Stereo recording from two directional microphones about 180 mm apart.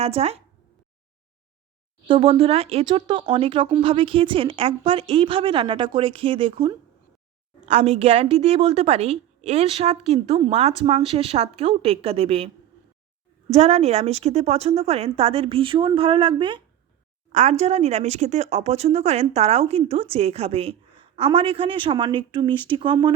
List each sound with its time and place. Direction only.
0.0 s speech: 35° right (ahead or behind)
2.0 s speech: 30° right (ahead or behind)
13.5 s speech: 40° right (ahead or behind)
17.3 s speech: 40° right (ahead or behind)